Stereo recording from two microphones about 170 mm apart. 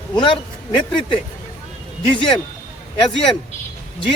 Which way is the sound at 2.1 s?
30° left (ahead or behind).